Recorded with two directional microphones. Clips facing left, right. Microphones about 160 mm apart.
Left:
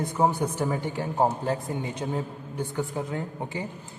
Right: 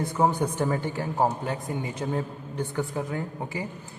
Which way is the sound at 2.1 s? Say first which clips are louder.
Right 1 dB; 15° left (ahead or behind).